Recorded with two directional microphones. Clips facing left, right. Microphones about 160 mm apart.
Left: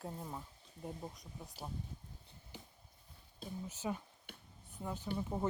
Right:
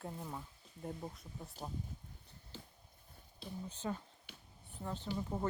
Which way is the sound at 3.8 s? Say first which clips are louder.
Left 1 dB; 10° left (ahead or behind).